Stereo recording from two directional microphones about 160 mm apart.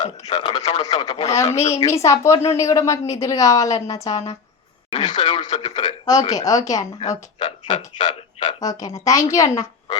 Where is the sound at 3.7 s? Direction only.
40° left (ahead or behind).